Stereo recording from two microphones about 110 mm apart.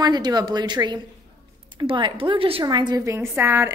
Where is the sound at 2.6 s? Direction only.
40° right (ahead or behind).